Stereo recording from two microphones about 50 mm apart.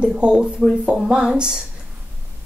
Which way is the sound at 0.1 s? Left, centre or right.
Centre.